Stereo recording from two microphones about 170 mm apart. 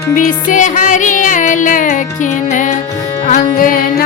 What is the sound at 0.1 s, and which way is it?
Music, 50° left (ahead or behind).